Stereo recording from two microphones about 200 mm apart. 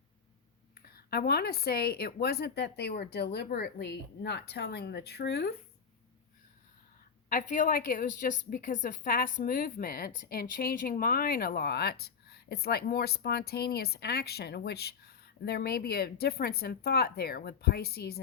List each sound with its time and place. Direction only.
0.7 s a woman's voice: 50° left (ahead or behind)
7.3 s a woman's voice: 40° left (ahead or behind)